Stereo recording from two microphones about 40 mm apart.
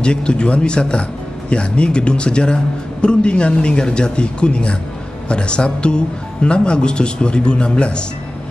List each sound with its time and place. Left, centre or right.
0.0 s a man's voice: left